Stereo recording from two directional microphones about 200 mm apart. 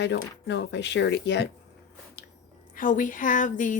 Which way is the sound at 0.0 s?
60° left (ahead or behind).